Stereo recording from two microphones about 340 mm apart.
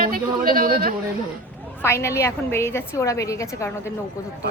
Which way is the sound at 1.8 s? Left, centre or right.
Centre.